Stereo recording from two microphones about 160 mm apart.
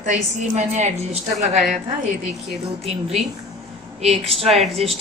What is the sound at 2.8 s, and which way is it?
Speech, 40° right (ahead or behind).